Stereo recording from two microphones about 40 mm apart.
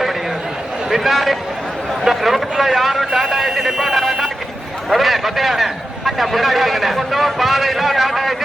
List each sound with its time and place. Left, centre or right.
0.9 s a man's voice: centre